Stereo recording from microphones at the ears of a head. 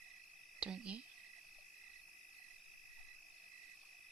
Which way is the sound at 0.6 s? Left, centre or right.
Right.